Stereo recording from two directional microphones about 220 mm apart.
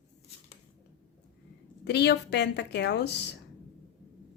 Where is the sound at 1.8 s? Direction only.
50° left (ahead or behind).